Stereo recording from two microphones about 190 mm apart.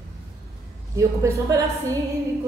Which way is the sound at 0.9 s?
15° right (ahead or behind).